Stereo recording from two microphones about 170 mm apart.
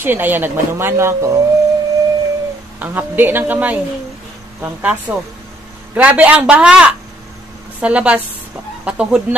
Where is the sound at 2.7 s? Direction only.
10° right (ahead or behind).